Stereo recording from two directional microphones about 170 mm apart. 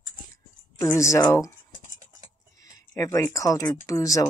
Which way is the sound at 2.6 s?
20° left (ahead or behind).